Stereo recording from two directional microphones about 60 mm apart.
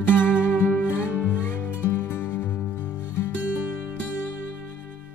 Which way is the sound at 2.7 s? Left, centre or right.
Right.